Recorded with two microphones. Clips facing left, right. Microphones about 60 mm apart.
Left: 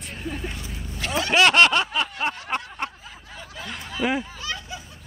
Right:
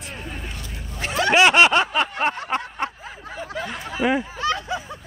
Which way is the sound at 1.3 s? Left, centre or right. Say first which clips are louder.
Right 2 dB; centre.